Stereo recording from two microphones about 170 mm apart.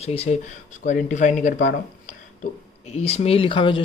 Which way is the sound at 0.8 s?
50° left (ahead or behind).